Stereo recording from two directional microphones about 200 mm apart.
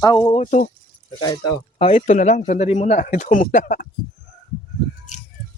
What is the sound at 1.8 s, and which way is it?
Speech, 30° left (ahead or behind).